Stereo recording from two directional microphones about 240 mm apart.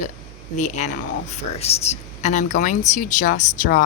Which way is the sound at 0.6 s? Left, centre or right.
Left.